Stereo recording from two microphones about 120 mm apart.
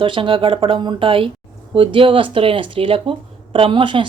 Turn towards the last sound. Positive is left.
turn(degrees=-45)  # may be behind; listen again after turning